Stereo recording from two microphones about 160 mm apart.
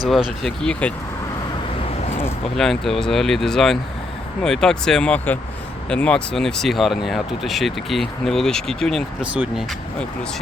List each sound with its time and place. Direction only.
0.1 s speech: centre (ahead or behind)
2.6 s speech: centre (ahead or behind)